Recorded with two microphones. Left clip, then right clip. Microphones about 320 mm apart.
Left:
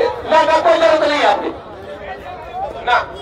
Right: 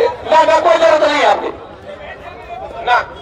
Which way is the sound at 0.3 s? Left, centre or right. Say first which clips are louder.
Right 2 dB; centre.